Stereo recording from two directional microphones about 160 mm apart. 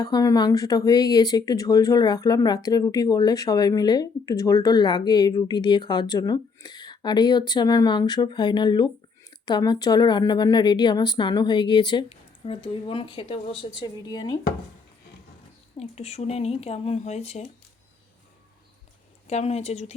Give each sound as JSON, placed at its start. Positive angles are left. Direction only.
{"t": 0.0, "sound": "speech", "side_deg": 25}
{"t": 15.8, "sound": "speech", "side_deg": 40}
{"t": 19.3, "sound": "speech", "side_deg": 40}